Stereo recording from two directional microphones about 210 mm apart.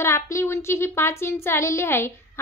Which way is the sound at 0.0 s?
15° left (ahead or behind).